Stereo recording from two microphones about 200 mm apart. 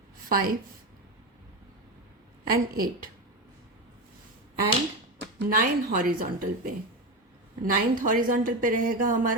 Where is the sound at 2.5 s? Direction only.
45° right (ahead or behind).